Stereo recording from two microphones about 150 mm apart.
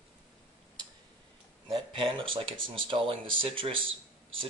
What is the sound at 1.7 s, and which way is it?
Speech, 35° right (ahead or behind).